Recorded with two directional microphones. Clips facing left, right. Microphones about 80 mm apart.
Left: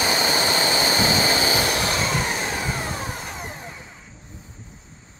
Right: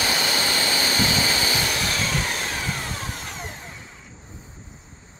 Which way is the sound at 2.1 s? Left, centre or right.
Centre.